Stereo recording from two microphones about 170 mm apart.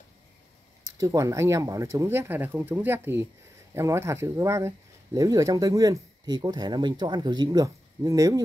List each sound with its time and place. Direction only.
0.9 s speech: 20° right (ahead or behind)